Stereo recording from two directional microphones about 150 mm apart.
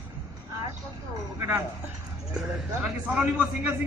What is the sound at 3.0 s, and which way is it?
Speech, 5° right (ahead or behind).